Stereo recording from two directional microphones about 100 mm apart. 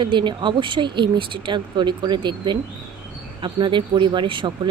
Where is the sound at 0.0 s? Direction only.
55° right (ahead or behind).